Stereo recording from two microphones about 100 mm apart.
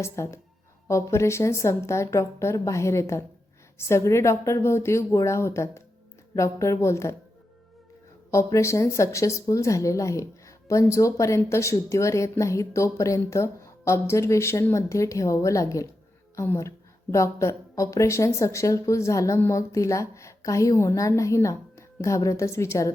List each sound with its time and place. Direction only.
0.0 s a woman's voice: 30° left (ahead or behind)
8.3 s speech: 30° left (ahead or behind)